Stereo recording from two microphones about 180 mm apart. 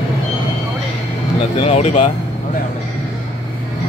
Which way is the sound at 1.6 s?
40° left (ahead or behind).